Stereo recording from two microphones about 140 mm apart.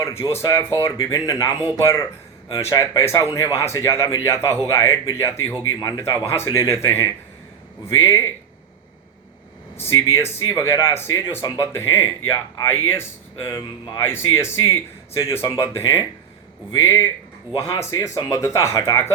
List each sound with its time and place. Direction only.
0.0 s speech: 20° left (ahead or behind)
9.7 s speech: 20° left (ahead or behind)